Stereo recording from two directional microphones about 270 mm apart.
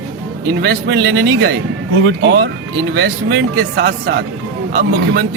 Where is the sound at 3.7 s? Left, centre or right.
Right.